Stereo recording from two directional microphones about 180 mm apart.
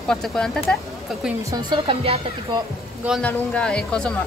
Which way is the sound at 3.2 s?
5° left (ahead or behind).